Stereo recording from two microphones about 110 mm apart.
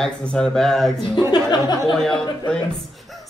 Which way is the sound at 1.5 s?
40° left (ahead or behind).